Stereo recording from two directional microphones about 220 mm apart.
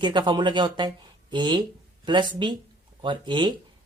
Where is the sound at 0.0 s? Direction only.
20° right (ahead or behind).